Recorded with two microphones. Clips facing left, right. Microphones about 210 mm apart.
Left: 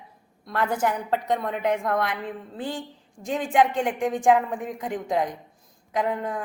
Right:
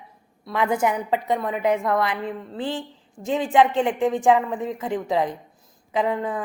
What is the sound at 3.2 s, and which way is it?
Speech, 60° right (ahead or behind).